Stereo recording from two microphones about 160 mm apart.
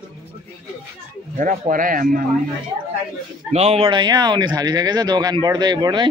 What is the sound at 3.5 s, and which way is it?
Speech, 40° right (ahead or behind).